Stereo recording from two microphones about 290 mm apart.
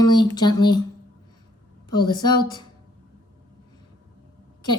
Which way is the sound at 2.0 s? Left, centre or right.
Centre.